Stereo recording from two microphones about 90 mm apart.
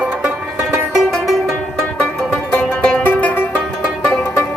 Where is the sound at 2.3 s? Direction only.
10° left (ahead or behind).